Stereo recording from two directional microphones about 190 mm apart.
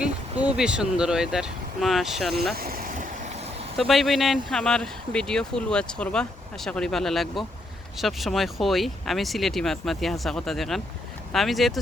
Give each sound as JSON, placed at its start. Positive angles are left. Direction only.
{"t": 0.4, "sound": "speech", "side_deg": -5}
{"t": 2.6, "sound": "vehicle", "side_deg": -50}
{"t": 3.8, "sound": "speech", "side_deg": 0}